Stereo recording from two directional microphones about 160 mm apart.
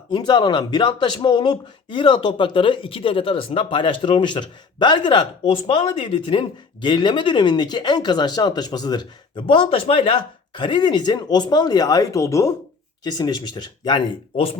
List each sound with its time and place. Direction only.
0.1 s speech: 30° left (ahead or behind)